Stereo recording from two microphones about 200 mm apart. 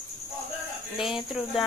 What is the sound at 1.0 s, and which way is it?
Speech, centre (ahead or behind).